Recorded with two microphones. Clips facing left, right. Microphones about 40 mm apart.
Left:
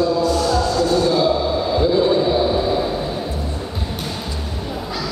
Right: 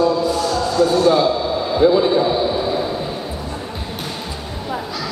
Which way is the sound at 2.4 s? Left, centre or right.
Centre.